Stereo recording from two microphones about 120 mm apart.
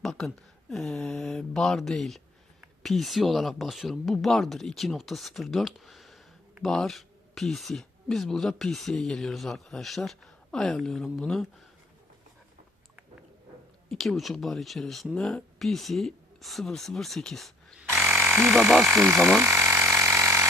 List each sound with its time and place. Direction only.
0.0 s speech: 5° left (ahead or behind)
13.9 s speech: centre (ahead or behind)
18.0 s frog: 5° right (ahead or behind)
19.4 s a sound: 15° right (ahead or behind)